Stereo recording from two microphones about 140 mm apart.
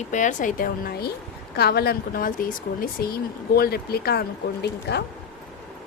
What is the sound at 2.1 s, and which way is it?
Speech, 85° left.